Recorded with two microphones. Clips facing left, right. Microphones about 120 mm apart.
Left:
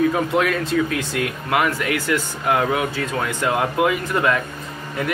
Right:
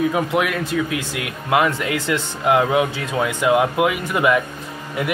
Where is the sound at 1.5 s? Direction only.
20° right (ahead or behind).